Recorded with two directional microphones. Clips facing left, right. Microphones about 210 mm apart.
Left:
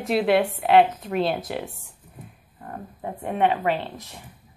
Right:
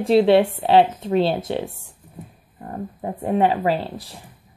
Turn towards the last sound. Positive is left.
turn(degrees=-35)  # may be behind; listen again after turning